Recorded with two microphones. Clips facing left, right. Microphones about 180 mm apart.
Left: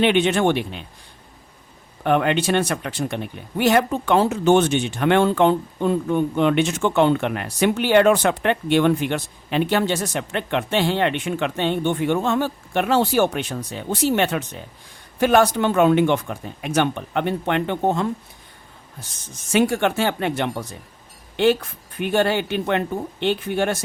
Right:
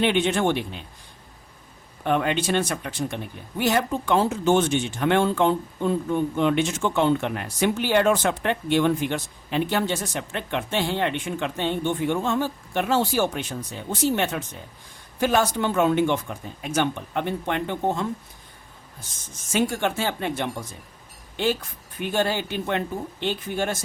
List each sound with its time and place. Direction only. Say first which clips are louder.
0.0 s speech: left 4 dB; 70° left (ahead or behind)
2.0 s speech: left 4 dB; 60° left (ahead or behind)
19.5 s speech: left 5 dB; 65° left (ahead or behind)